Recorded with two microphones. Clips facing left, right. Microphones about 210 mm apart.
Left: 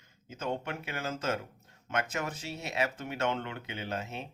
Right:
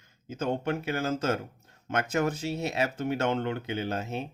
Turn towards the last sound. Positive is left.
turn(degrees=-40)  # may be behind; listen again after turning